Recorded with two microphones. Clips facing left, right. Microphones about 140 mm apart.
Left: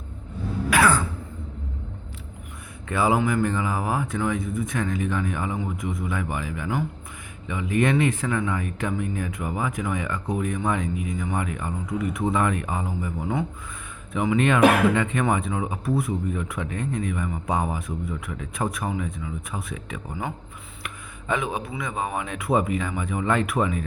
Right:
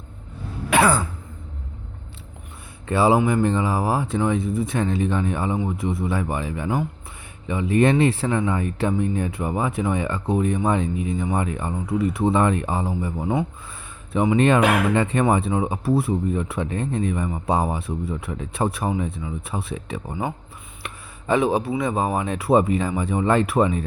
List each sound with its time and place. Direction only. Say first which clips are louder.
0.7 s throat clearing: right 2 dB; 25° right (ahead or behind)
2.9 s speech: right 4 dB; 30° right (ahead or behind)